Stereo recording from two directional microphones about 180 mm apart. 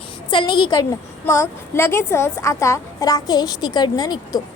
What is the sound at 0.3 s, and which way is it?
A woman's voice, 25° left (ahead or behind).